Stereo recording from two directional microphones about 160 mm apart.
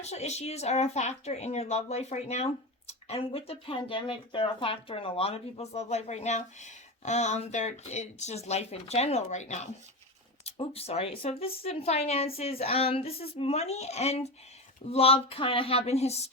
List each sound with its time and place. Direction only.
0.0 s speech: 45° left (ahead or behind)